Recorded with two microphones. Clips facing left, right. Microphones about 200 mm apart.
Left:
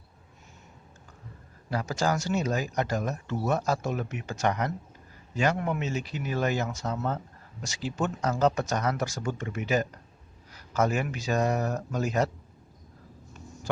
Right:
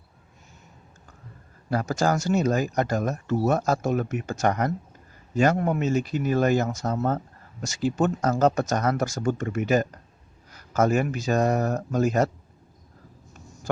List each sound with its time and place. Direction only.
1.7 s speech: 45° right (ahead or behind)